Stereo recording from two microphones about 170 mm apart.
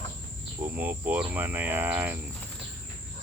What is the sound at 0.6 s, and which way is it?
Speech, 10° right (ahead or behind).